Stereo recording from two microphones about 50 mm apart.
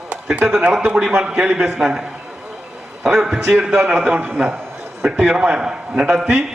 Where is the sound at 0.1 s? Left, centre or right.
Right.